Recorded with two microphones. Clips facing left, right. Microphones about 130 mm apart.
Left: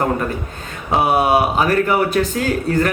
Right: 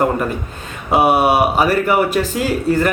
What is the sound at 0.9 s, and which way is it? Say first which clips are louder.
Speech: right 2 dB; 5° right (ahead or behind).